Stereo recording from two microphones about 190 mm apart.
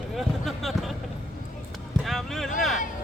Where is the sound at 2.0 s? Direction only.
Centre (ahead or behind).